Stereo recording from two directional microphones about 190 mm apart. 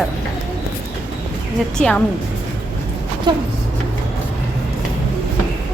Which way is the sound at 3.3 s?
25° right (ahead or behind).